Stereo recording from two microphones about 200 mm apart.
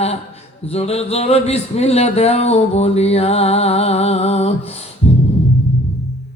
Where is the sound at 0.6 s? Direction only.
30° left (ahead or behind).